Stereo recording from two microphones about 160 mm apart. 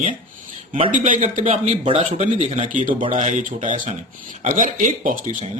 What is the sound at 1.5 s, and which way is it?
Speech, 35° right (ahead or behind).